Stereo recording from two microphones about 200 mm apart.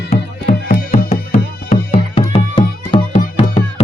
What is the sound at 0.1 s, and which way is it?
Music, 35° left (ahead or behind).